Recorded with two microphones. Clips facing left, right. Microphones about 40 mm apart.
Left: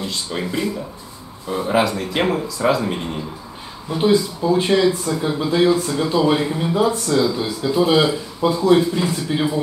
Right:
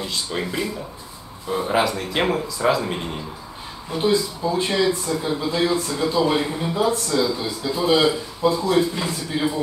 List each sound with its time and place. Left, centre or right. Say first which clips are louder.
0.0 s speech: left 1 dB; centre
8.4 s speech: left 1 dB; left
8.7 s speech: left 3 dB; centre